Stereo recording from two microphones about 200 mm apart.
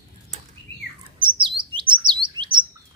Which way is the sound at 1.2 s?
25° right (ahead or behind).